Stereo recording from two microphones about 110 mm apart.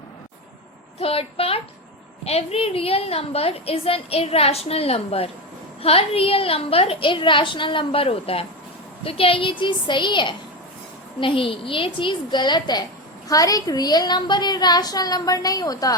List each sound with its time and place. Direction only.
0.9 s a woman's voice: 60° left (ahead or behind); by 16.0 s 35° left (ahead or behind)